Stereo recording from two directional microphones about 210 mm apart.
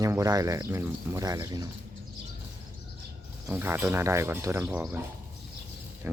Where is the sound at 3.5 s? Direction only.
10° right (ahead or behind).